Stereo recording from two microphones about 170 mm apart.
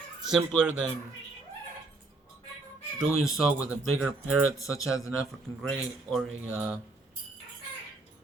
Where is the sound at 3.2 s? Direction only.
5° right (ahead or behind).